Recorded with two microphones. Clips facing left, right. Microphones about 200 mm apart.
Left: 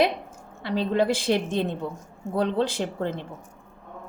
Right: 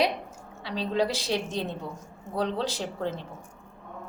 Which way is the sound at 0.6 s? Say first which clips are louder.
Left 4 dB; 50° left (ahead or behind).